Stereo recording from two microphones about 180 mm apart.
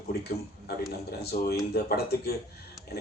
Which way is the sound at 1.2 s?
60° left (ahead or behind).